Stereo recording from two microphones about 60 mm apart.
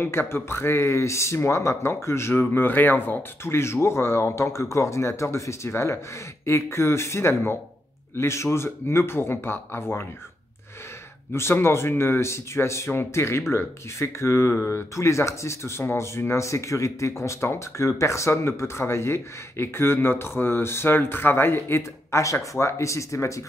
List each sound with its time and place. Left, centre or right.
0.0 s speech: left
11.3 s speech: left
22.1 s speech: left